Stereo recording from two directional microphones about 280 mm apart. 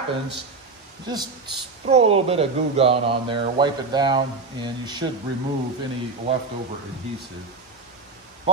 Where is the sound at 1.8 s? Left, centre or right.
Right.